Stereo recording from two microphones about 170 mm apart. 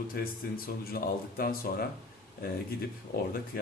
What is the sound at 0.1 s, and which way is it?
Speech, 60° left (ahead or behind).